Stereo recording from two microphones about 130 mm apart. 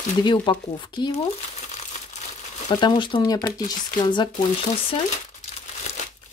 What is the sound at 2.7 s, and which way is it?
Speech, 35° left (ahead or behind).